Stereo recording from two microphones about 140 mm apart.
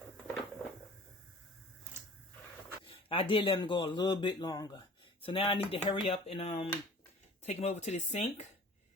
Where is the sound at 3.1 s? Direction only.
40° left (ahead or behind).